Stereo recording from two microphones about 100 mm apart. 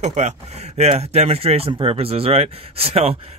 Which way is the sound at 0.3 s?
90° right.